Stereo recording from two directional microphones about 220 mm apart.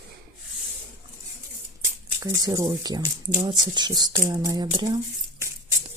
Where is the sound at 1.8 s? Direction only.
15° right (ahead or behind).